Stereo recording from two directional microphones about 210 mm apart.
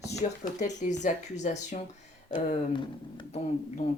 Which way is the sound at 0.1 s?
35° left (ahead or behind).